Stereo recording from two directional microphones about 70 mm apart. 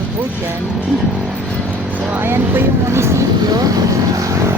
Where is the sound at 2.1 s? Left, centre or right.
Right.